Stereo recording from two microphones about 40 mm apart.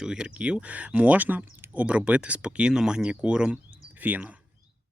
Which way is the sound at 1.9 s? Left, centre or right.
Right.